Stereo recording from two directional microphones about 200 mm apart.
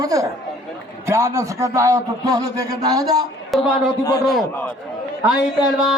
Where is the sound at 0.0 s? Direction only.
15° right (ahead or behind).